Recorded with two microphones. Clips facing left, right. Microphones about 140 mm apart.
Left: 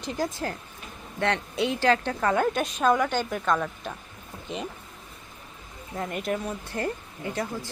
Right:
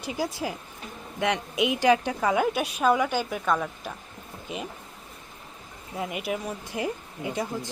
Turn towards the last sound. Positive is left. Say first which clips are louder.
# right 1 dB
turn(degrees=-15)  # may be behind; listen again after turning